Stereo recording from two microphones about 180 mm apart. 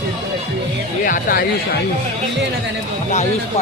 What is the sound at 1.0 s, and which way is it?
Speech, 50° left (ahead or behind).